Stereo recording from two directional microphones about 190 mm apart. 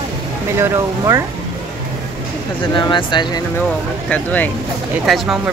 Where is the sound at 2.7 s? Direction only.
25° left (ahead or behind).